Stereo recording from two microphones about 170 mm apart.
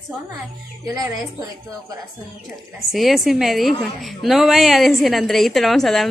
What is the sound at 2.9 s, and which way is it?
A woman's voice, centre (ahead or behind).